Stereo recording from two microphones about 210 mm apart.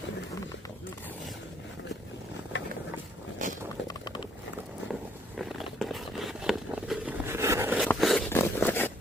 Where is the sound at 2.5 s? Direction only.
60° left (ahead or behind).